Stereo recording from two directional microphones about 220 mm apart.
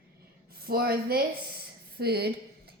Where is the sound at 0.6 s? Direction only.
45° right (ahead or behind).